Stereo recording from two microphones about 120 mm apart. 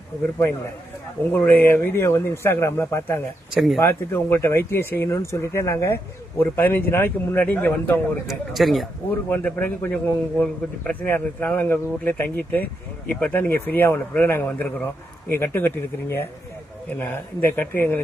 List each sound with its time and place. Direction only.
1.3 s speech: 15° left (ahead or behind)
3.5 s speech: centre (ahead or behind)
3.8 s a man's voice: 20° left (ahead or behind)
8.3 s speech: centre (ahead or behind)
9.3 s a man's voice: 15° left (ahead or behind)